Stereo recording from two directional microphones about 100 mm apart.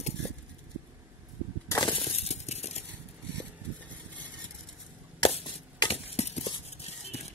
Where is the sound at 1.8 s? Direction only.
60° left (ahead or behind); by 2.8 s 90° left.